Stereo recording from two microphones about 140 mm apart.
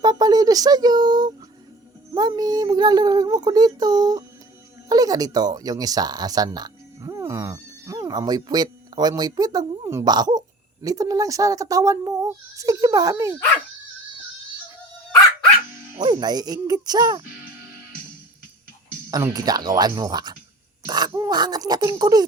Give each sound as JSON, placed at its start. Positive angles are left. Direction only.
{"t": 0.0, "sound": "a child's voice", "side_deg": -30}
{"t": 16.0, "sound": "a child's voice", "side_deg": -30}
{"t": 19.1, "sound": "a child's voice", "side_deg": -25}